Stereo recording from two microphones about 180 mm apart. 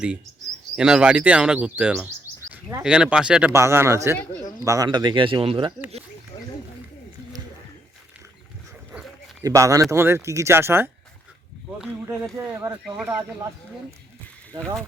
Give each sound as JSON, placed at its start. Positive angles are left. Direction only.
{"t": 0.8, "sound": "speech", "side_deg": -5}
{"t": 3.5, "sound": "speech", "side_deg": -15}
{"t": 9.4, "sound": "speech", "side_deg": -20}
{"t": 12.4, "sound": "speech", "side_deg": -15}
{"t": 14.5, "sound": "speech", "side_deg": -25}